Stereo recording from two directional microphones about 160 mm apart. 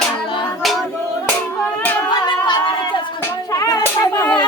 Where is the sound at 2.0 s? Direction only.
30° left (ahead or behind).